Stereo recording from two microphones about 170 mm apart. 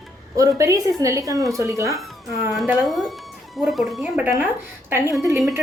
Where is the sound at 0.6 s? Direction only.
20° right (ahead or behind).